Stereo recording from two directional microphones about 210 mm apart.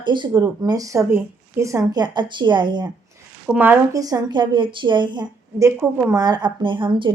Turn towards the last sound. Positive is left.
turn(degrees=-20)  # may be behind; listen again after turning